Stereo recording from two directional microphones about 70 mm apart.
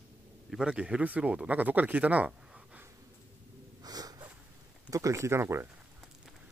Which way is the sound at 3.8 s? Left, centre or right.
Right.